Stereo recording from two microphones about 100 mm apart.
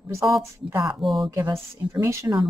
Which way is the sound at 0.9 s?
5° right (ahead or behind).